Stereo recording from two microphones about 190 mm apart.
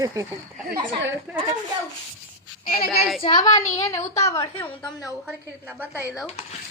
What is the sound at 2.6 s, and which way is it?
Speech, 50° left (ahead or behind).